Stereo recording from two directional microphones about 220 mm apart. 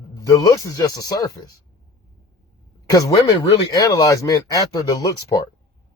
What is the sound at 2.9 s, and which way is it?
Speech, 20° left (ahead or behind).